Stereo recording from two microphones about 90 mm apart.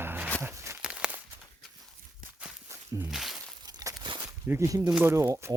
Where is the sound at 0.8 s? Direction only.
10° right (ahead or behind).